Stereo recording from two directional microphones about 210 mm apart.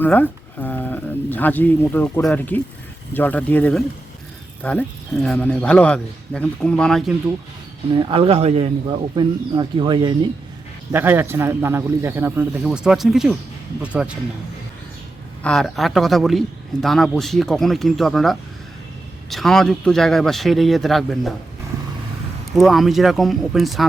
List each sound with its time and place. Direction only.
0.0 s speech: 10° left (ahead or behind)
7.9 s speech: 25° right (ahead or behind)
10.9 s speech: 10° right (ahead or behind)
15.4 s speech: centre (ahead or behind)
22.5 s speech: centre (ahead or behind)